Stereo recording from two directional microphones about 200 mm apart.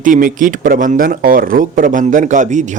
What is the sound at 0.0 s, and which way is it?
Speech, 40° right (ahead or behind).